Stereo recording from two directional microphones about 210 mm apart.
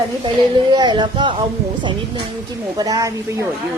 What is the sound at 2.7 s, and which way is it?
Speech, 15° right (ahead or behind).